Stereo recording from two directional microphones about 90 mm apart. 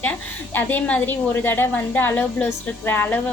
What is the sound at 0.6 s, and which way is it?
A woman's voice, 20° left (ahead or behind).